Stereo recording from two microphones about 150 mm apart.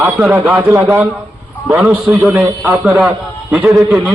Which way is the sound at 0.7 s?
25° right (ahead or behind).